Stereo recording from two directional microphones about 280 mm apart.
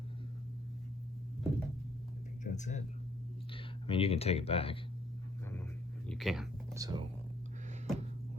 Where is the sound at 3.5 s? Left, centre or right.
Centre.